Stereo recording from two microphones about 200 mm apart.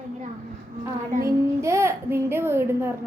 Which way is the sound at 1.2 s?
15° right (ahead or behind).